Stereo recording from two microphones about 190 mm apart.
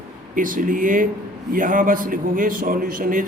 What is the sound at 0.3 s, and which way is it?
A man's voice, 45° right (ahead or behind).